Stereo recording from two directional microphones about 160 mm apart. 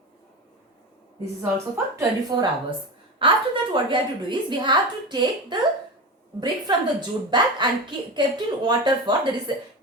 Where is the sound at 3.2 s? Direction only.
35° right (ahead or behind).